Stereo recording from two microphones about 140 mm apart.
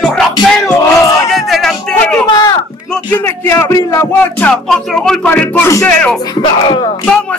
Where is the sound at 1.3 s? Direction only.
Centre (ahead or behind).